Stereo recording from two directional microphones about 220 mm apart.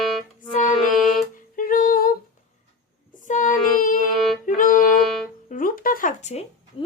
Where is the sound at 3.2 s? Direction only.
35° left (ahead or behind).